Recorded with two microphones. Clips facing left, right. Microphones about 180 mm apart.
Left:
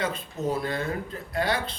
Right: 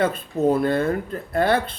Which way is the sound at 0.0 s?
55° right (ahead or behind).